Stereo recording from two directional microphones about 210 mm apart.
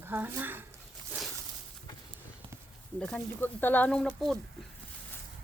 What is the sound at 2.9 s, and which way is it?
Speech, 5° left (ahead or behind).